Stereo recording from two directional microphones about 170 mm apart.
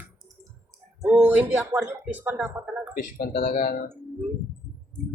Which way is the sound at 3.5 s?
45° left (ahead or behind).